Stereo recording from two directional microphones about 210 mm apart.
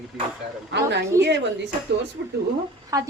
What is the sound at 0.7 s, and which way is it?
Speech, 55° right (ahead or behind).